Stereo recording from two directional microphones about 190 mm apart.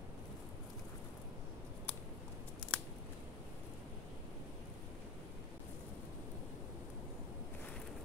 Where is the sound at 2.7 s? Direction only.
5° left (ahead or behind).